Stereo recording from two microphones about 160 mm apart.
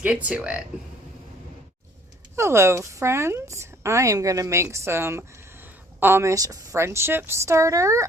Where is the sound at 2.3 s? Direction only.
15° right (ahead or behind).